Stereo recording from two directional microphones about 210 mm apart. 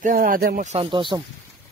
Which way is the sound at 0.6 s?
25° right (ahead or behind).